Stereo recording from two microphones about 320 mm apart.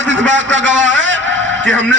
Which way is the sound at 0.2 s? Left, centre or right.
Right.